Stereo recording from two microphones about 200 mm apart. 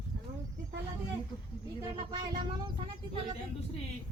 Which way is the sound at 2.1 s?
20° right (ahead or behind).